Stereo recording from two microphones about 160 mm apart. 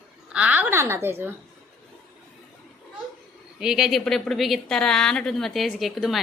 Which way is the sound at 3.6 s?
5° right (ahead or behind).